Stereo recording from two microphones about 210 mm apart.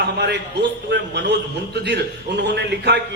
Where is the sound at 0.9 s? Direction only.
55° right (ahead or behind).